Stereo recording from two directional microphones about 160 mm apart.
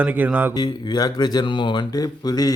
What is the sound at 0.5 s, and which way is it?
Mantra, 25° left (ahead or behind).